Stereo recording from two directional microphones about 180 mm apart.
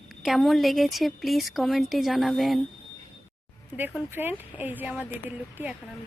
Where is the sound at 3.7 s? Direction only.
10° right (ahead or behind).